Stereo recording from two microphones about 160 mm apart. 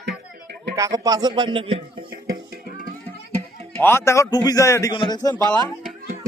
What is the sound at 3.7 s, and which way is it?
A man's voice, 15° left (ahead or behind).